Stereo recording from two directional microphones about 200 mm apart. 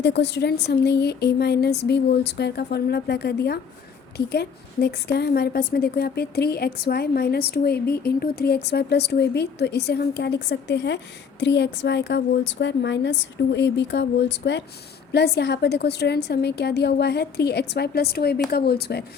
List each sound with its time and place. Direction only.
0.0 s a woman's voice: 60° left (ahead or behind)